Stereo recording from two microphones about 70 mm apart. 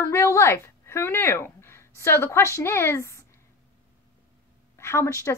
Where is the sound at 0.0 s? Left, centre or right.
Left.